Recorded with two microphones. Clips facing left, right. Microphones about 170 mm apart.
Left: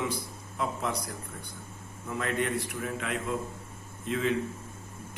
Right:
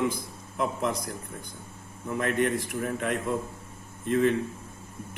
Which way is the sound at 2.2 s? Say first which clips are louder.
Right 4 dB; 50° right (ahead or behind).